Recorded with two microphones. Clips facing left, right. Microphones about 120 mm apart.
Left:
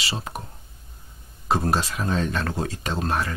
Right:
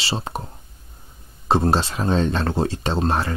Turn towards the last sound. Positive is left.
turn(degrees=-30)  # may be behind; listen again after turning